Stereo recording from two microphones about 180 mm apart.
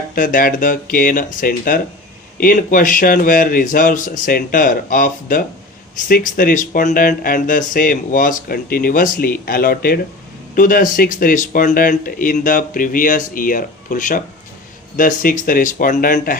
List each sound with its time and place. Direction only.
0.1 s speech: 50° left (ahead or behind)